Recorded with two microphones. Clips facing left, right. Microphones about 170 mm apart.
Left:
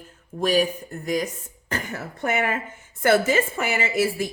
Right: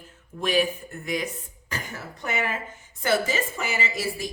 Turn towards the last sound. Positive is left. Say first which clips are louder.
# left 6 dB
turn(degrees=60)  # may be behind; listen again after turning